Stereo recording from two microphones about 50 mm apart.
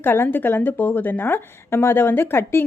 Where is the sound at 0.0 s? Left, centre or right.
Left.